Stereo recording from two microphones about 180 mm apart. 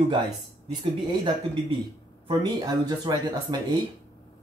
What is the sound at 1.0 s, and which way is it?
Speech, 25° right (ahead or behind).